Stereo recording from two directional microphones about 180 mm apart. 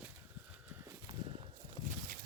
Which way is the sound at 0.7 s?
15° right (ahead or behind).